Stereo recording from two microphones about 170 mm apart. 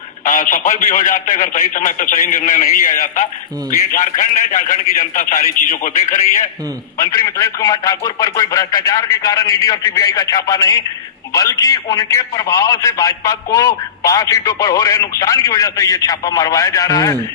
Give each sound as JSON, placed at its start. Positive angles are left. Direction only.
{"t": 0.3, "sound": "a man's voice", "side_deg": 50}
{"t": 7.3, "sound": "speech", "side_deg": 20}